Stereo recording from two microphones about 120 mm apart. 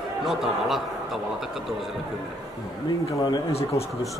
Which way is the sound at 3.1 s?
35° left (ahead or behind).